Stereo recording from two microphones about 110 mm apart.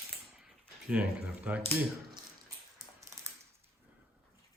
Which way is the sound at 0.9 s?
10° right (ahead or behind).